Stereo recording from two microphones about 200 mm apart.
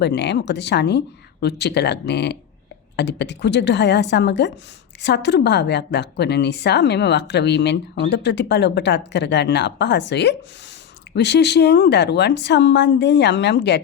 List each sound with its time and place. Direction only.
0.0 s a woman's voice: 60° left (ahead or behind)